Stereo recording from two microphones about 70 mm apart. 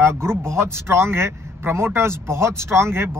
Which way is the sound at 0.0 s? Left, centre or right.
Right.